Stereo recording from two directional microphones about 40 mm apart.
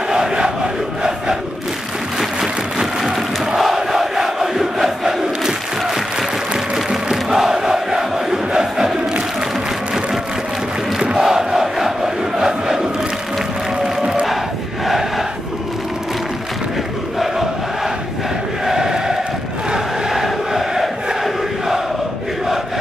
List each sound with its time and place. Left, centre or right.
0.1 s crowd: centre
11.0 s crowd: centre
18.7 s crowd: centre